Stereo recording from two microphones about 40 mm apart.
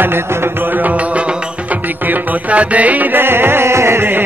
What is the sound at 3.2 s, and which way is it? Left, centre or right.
Music, right.